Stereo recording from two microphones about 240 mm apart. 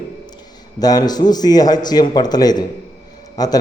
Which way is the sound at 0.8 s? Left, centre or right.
Centre.